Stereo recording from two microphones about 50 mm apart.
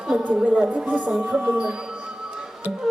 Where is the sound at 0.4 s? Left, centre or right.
Right.